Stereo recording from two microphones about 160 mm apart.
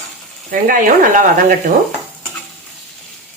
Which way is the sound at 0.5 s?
60° right (ahead or behind).